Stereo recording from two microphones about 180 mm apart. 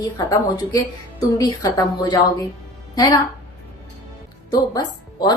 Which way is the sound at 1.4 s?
20° left (ahead or behind).